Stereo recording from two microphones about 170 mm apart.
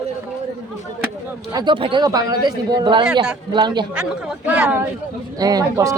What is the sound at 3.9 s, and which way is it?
Speech, 5° right (ahead or behind).